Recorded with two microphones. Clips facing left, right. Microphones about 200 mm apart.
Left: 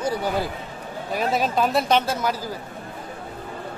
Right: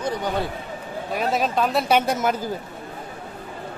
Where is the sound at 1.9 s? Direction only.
15° right (ahead or behind).